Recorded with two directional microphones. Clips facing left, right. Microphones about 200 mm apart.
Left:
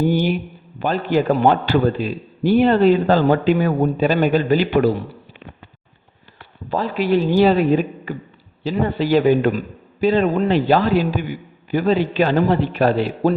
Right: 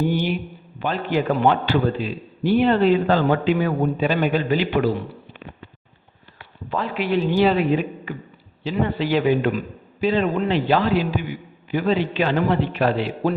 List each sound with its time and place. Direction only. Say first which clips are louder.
0.0 s a man's voice: left 4 dB; 40° left (ahead or behind)
6.7 s a man's voice: left 4 dB; 40° left (ahead or behind)